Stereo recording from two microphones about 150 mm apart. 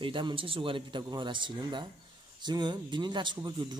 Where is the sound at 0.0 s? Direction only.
35° right (ahead or behind).